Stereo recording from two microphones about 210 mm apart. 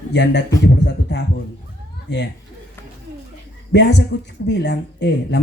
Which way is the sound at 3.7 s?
55° left (ahead or behind).